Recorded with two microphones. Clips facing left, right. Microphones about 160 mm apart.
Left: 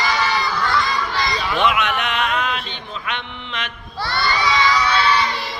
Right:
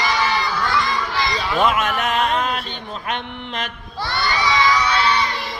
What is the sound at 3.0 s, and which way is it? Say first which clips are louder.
Sheep: right 3 dB; 40° right (ahead or behind).